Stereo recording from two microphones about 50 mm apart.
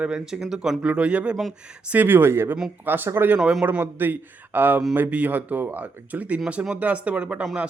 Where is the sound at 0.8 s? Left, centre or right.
Right.